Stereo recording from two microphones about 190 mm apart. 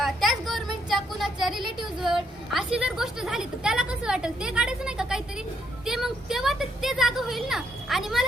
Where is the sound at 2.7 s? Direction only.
5° right (ahead or behind).